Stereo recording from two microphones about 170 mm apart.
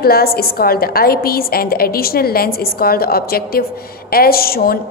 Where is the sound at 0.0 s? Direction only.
65° left (ahead or behind).